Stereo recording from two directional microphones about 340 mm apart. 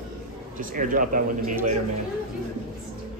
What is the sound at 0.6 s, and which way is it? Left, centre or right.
Speech, right.